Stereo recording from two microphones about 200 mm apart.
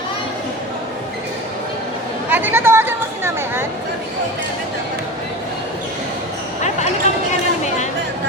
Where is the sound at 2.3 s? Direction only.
10° right (ahead or behind).